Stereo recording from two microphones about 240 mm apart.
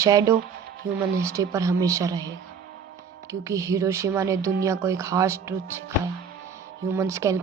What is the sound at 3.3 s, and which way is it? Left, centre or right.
Speech, centre.